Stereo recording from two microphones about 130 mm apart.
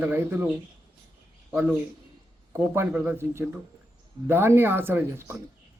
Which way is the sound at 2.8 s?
15° right (ahead or behind).